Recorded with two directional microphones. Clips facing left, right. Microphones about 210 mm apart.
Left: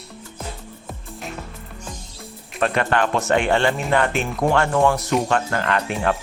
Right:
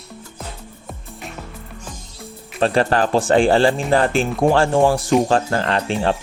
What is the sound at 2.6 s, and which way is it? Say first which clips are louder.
Speech: right 3 dB; 30° right (ahead or behind).